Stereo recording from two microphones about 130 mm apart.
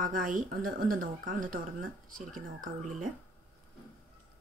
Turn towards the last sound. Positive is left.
turn(degrees=-90)